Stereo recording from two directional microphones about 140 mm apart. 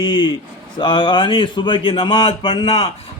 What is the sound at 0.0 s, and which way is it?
Speech, 35° left (ahead or behind).